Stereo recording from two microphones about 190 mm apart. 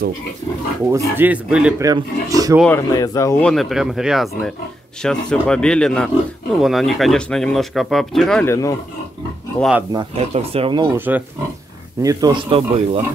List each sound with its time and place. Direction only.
0.8 s speech: 15° right (ahead or behind)
1.8 s speech: 20° right (ahead or behind)
2.9 s speech: 15° left (ahead or behind)
3.4 s speech: centre (ahead or behind)
8.5 s speech: 15° left (ahead or behind)
9.6 s speech: 5° right (ahead or behind)
9.9 s speech: 30° right (ahead or behind)
11.0 s speech: 10° right (ahead or behind); by 13.0 s 30° right (ahead or behind)